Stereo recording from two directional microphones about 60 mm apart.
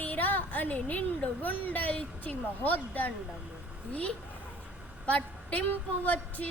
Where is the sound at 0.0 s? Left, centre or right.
Left.